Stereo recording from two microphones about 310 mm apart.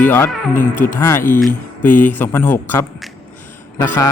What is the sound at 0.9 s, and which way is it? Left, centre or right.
Speech, centre.